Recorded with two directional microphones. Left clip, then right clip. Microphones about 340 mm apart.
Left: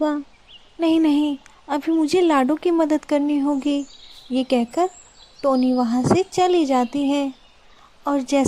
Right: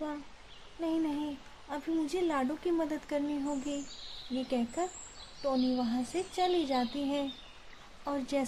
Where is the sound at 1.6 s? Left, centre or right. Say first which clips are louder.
Left 14 dB; left.